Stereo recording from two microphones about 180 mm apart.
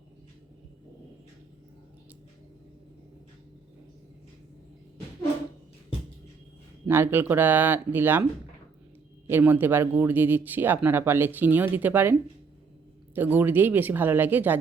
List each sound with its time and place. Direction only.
6.8 s speech: 10° right (ahead or behind)
9.3 s speech: 10° right (ahead or behind)
13.1 s speech: 10° right (ahead or behind)